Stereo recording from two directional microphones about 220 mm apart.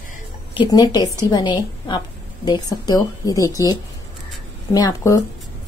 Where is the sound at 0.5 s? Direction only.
20° left (ahead or behind).